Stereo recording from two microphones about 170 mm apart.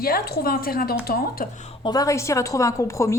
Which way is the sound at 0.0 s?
60° left (ahead or behind).